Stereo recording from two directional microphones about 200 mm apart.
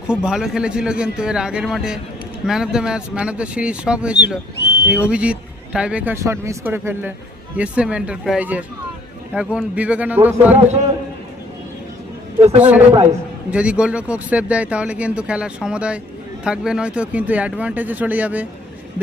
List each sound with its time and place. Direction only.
0.1 s speech: 5° right (ahead or behind)
12.5 s speech: 10° right (ahead or behind)
12.9 s a man's voice: 30° right (ahead or behind)
13.5 s speech: 5° right (ahead or behind)